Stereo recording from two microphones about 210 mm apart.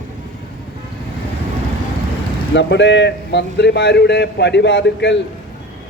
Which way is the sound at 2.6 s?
60° left (ahead or behind).